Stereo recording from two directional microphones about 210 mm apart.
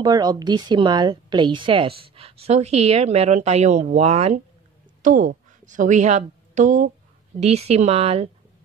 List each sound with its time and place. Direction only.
0.0 s a woman's voice: 20° right (ahead or behind)